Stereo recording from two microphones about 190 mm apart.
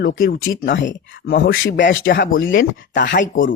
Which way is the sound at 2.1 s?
60° left (ahead or behind).